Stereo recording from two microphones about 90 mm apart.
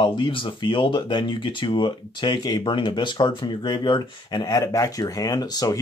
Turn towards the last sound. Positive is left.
turn(degrees=45)  # may be behind; listen again after turning